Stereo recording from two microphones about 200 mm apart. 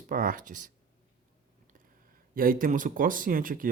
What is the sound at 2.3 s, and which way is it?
Speech, 45° right (ahead or behind).